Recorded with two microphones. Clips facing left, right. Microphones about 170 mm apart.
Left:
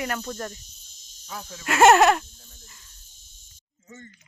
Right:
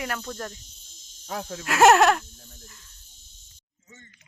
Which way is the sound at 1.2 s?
55° right (ahead or behind).